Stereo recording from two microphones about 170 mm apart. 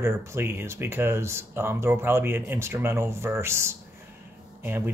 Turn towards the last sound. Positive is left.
turn(degrees=-15)  # may be behind; listen again after turning